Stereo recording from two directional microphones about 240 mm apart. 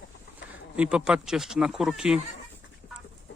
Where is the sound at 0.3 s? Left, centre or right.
Centre.